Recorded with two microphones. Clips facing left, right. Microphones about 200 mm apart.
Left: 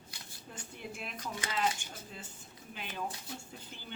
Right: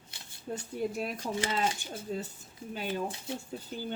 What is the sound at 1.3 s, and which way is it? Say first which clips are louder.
Speech: right 2 dB; 25° right (ahead or behind).